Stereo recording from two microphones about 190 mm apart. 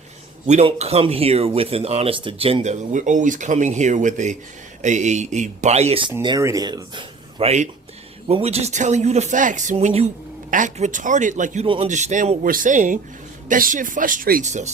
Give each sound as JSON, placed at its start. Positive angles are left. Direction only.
{"t": 0.4, "sound": "speech", "side_deg": -35}
{"t": 6.2, "sound": "speech", "side_deg": -20}
{"t": 11.6, "sound": "speech", "side_deg": -30}